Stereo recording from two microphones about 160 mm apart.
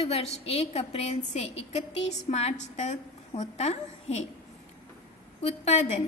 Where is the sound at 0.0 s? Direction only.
40° left (ahead or behind).